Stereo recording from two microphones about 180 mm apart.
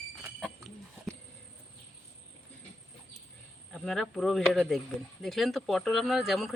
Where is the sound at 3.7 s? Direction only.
5° left (ahead or behind).